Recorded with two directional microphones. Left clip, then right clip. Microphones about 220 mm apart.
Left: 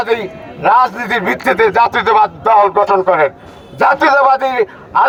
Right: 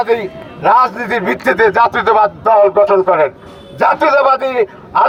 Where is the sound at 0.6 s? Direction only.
20° left (ahead or behind).